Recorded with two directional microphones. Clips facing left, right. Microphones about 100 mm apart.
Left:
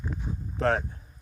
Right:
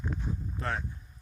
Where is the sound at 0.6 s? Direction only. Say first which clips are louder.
Left 10 dB; 70° left (ahead or behind).